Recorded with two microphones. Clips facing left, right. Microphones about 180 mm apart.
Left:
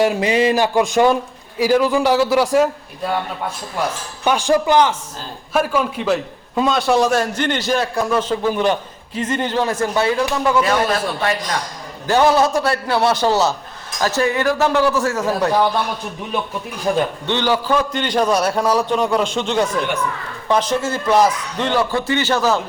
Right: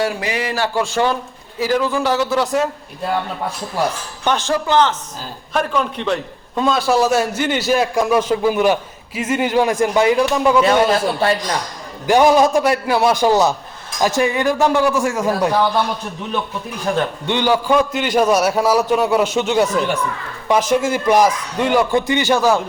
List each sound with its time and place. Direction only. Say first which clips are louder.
0.0 s a man's voice: left 5 dB; 20° left (ahead or behind)
4.2 s a man's voice: left 3 dB; 10° left (ahead or behind); by 10.6 s 15° right (ahead or behind)
10.6 s a man's voice: right 3 dB; 25° right (ahead or behind)
12.0 s a man's voice: right 2 dB; 15° right (ahead or behind)
17.2 s a man's voice: right 5 dB; 15° right (ahead or behind)